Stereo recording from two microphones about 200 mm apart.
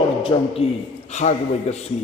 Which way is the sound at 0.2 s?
25° left (ahead or behind).